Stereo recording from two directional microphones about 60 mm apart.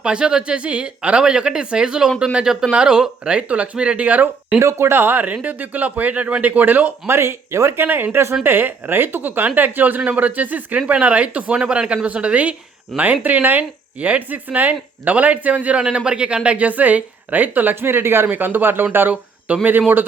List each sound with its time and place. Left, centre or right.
0.0 s speech: centre
4.6 s speech: right
7.1 s speech: right
7.9 s speech: right
12.9 s speech: centre
13.2 s speech: right
19.5 s speech: right